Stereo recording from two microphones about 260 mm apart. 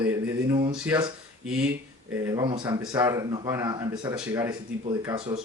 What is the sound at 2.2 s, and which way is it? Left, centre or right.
Speech, centre.